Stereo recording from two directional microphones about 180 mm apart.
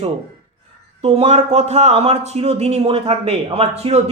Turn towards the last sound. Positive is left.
turn(degrees=-35)  # may be behind; listen again after turning